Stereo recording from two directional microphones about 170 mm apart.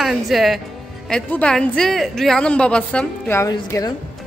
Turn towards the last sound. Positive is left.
turn(degrees=20)  # may be behind; listen again after turning